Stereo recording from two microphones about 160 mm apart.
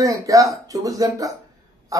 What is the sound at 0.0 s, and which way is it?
Speech, 20° right (ahead or behind).